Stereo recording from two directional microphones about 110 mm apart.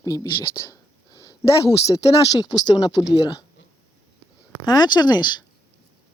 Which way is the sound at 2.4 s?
40° left (ahead or behind).